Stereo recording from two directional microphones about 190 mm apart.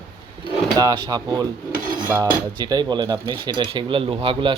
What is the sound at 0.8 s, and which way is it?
Speech, 20° right (ahead or behind).